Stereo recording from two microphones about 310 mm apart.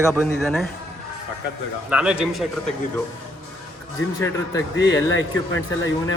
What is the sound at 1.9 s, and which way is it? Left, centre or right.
Speech, centre.